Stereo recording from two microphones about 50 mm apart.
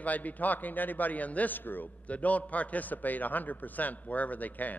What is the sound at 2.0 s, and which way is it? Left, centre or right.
A man's voice, left.